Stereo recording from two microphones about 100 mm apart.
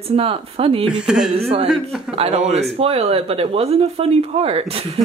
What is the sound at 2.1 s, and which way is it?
Speech, 80° right.